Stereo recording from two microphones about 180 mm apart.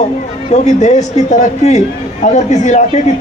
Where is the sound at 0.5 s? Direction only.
40° left (ahead or behind).